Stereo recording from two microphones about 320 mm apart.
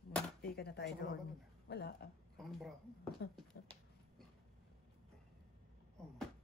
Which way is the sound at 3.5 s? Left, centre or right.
Left.